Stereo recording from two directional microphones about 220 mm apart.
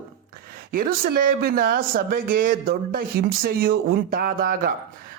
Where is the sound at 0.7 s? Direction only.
40° right (ahead or behind).